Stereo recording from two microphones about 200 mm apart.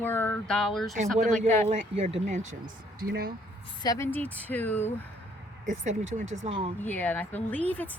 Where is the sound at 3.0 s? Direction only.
50° right (ahead or behind).